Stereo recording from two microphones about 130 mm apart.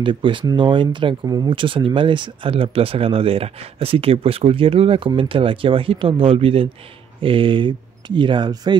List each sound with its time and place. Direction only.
0.0 s speech: 40° right (ahead or behind)
1.5 s speech: 40° right (ahead or behind)